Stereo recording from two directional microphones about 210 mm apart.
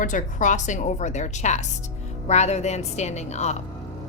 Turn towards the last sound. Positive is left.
turn(degrees=30)  # may be behind; listen again after turning